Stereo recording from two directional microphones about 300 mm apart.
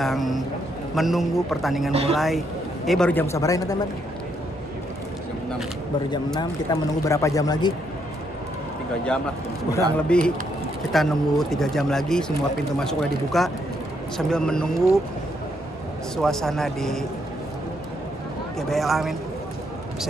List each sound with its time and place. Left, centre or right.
0.0 s a man's voice: centre
1.9 s speech: centre
2.1 s a man's voice: centre
6.0 s speech: centre
9.9 s a man's voice: centre
16.2 s a man's voice: centre
18.7 s a man's voice: centre